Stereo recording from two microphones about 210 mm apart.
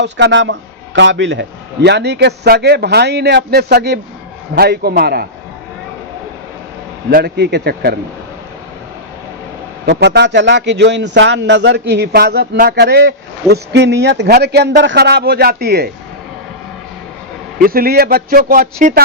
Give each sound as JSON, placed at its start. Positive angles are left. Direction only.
{"t": 0.0, "sound": "a man's voice", "side_deg": -55}
{"t": 7.1, "sound": "a man's voice", "side_deg": -50}
{"t": 9.8, "sound": "a man's voice", "side_deg": -55}
{"t": 17.7, "sound": "a man's voice", "side_deg": -45}